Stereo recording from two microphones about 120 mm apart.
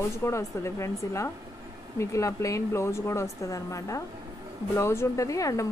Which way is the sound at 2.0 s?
25° left (ahead or behind).